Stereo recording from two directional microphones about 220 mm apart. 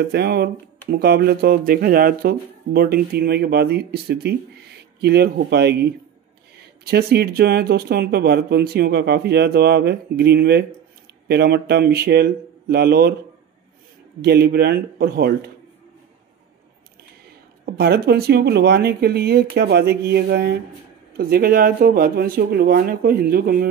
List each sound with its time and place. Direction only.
0.0 s speech: 45° right (ahead or behind)
6.9 s speech: 45° right (ahead or behind)
14.2 s speech: 45° right (ahead or behind)
17.6 s speech: 45° right (ahead or behind)